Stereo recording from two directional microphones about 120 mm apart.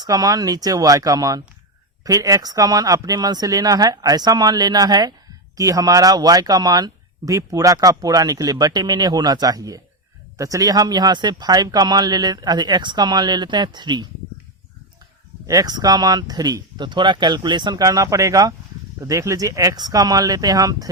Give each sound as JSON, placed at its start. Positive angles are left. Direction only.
{"t": 0.0, "sound": "speech", "side_deg": -30}
{"t": 15.4, "sound": "speech", "side_deg": -30}